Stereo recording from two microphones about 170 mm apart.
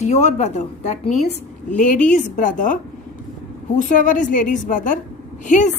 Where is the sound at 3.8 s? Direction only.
50° left (ahead or behind).